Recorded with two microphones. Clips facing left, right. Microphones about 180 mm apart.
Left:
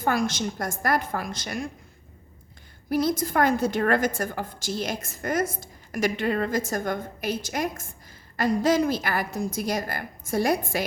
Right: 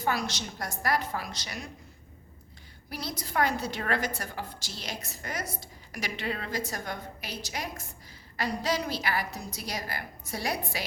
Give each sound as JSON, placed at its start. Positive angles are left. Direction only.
{"t": 0.0, "sound": "a woman's voice", "side_deg": 50}
{"t": 2.9, "sound": "a woman's voice", "side_deg": 50}